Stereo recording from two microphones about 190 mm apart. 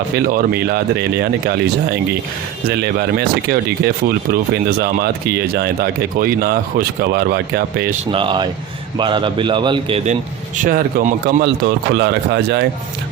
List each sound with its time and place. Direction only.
0.3 s speech: 50° right (ahead or behind)
8.1 s a man's voice: 25° right (ahead or behind)
10.6 s a man's voice: 50° right (ahead or behind)
11.4 s speech: 55° right (ahead or behind)